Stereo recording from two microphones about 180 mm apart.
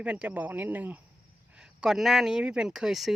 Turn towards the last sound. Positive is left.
turn(degrees=0)  # may be behind; listen again after turning